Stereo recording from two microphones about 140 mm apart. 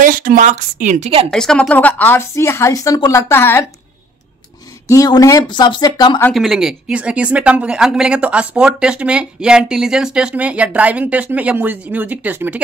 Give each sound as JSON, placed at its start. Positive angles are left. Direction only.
{"t": 0.0, "sound": "speech", "side_deg": -80}
{"t": 1.3, "sound": "a woman's voice", "side_deg": 5}
{"t": 4.8, "sound": "speech", "side_deg": 25}
{"t": 6.3, "sound": "speech", "side_deg": 0}